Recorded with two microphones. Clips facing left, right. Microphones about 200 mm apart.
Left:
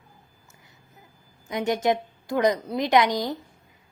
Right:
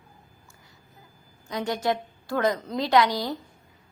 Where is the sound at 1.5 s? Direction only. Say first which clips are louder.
Left 3 dB; 20° left (ahead or behind).